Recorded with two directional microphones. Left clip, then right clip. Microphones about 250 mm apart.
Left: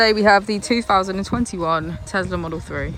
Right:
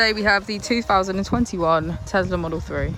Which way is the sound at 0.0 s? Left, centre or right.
Centre.